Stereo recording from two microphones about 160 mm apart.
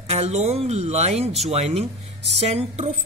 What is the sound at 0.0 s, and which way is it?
Speech, 40° right (ahead or behind).